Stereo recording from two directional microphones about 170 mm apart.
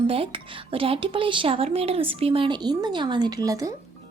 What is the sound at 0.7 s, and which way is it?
Speech, 35° right (ahead or behind).